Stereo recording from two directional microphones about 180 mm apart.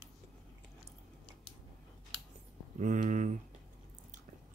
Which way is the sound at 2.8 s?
45° right (ahead or behind).